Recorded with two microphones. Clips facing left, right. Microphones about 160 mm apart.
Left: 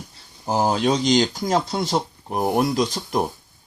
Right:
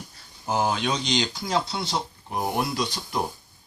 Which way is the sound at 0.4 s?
35° left (ahead or behind).